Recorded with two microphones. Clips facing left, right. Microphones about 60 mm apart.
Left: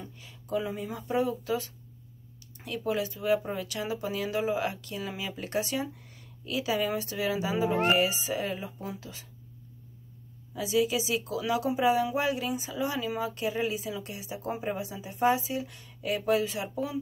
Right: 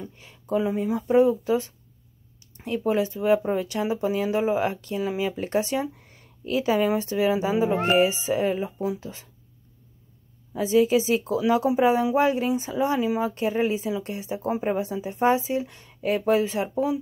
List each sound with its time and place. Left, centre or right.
0.2 s speech: right
10.5 s speech: right